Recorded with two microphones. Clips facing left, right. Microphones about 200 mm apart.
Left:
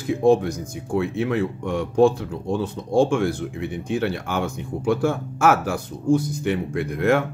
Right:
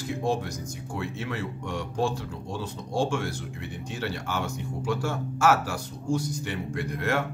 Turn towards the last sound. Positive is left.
turn(degrees=55)  # may be behind; listen again after turning